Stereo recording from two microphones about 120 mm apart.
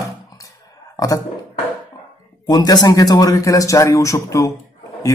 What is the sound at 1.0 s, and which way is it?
Speech, 30° left (ahead or behind).